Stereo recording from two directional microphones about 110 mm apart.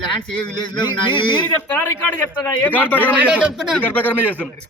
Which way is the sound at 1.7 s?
15° left (ahead or behind).